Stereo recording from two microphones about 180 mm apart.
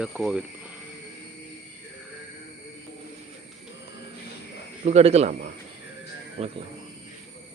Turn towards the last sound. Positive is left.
turn(degrees=-35)  # may be behind; listen again after turning